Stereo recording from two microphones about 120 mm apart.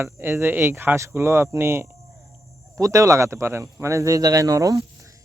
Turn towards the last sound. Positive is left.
turn(degrees=-30)  # may be behind; listen again after turning